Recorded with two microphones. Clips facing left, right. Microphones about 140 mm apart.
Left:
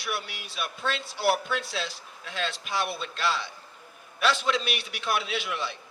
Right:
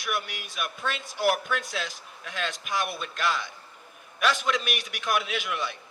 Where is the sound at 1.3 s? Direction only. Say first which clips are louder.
Left 1 dB; 50° right (ahead or behind).